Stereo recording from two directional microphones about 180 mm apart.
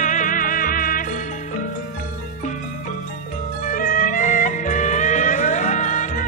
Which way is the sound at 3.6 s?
50° left (ahead or behind).